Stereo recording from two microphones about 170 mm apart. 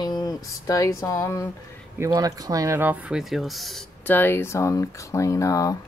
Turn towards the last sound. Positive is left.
turn(degrees=20)  # may be behind; listen again after turning